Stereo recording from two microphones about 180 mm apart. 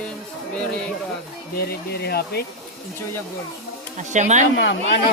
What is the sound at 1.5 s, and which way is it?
Speech, 60° left (ahead or behind).